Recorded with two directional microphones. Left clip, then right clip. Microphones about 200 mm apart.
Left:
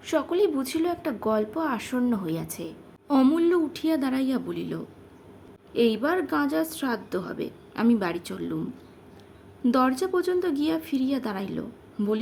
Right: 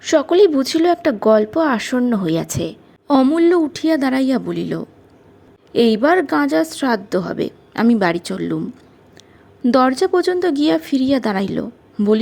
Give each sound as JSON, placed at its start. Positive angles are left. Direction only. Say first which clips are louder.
{"t": 0.0, "sound": "speech", "louder": "right 11 dB", "side_deg": -25}
{"t": 9.6, "sound": "speech", "louder": "right 9 dB", "side_deg": -25}